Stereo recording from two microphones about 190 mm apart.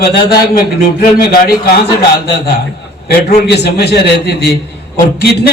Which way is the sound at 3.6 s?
55° left (ahead or behind).